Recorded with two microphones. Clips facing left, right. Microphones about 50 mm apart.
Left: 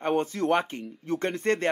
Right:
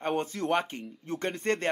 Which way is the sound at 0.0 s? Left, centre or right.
Left.